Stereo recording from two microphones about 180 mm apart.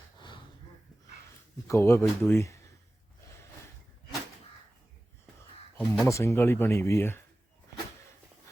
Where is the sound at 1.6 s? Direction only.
15° left (ahead or behind).